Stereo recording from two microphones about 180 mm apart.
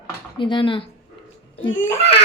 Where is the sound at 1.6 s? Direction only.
90° left.